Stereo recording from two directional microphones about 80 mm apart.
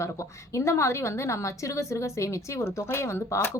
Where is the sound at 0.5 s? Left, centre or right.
Left.